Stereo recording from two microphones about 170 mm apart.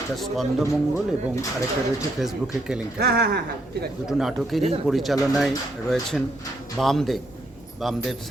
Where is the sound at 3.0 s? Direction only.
65° right (ahead or behind).